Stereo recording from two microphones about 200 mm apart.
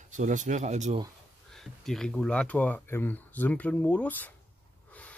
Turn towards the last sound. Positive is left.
turn(degrees=5)  # may be behind; listen again after turning